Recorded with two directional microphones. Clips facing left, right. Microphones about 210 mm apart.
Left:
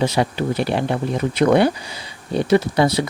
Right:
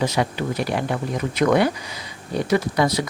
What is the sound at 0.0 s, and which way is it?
Speech, 30° left (ahead or behind).